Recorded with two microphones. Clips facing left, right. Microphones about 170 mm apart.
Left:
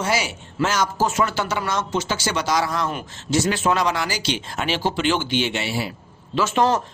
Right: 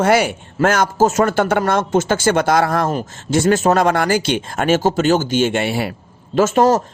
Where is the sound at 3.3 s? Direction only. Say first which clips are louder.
Right 6 dB; 50° right (ahead or behind).